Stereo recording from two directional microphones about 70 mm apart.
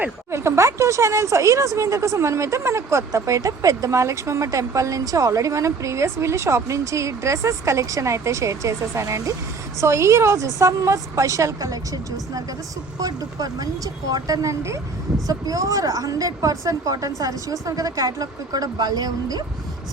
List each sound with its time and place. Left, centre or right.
0.3 s a woman's voice: right